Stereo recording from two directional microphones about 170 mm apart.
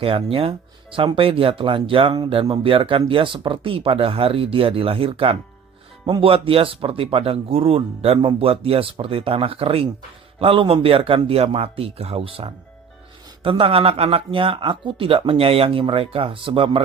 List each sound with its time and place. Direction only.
0.0 s speech: 35° right (ahead or behind)